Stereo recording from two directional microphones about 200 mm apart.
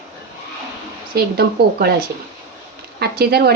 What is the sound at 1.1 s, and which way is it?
Speech, 50° right (ahead or behind).